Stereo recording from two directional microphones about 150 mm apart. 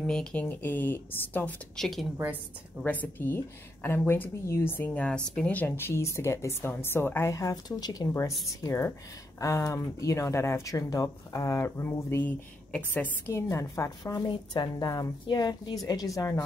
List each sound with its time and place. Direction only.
0.0 s a woman's voice: 5° left (ahead or behind); by 16.4 s 20° left (ahead or behind)